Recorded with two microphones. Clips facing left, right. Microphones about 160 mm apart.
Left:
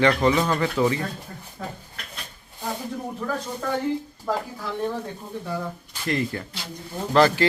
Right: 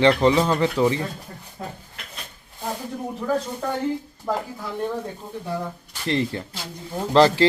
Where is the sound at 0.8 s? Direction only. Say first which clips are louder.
Right 1 dB; centre (ahead or behind).